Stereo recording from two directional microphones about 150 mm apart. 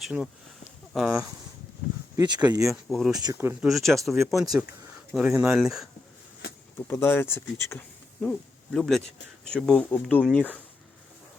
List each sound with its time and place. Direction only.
0.0 s speech: 5° right (ahead or behind)
2.1 s speech: 30° right (ahead or behind)
2.6 s speech: centre (ahead or behind)
3.2 s speech: 25° right (ahead or behind)
3.4 s speech: 10° right (ahead or behind)
3.7 s speech: centre (ahead or behind)
6.7 s speech: 15° left (ahead or behind)
8.2 s speech: 5° left (ahead or behind)